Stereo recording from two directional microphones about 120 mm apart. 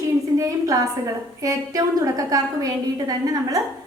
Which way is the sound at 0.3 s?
25° right (ahead or behind).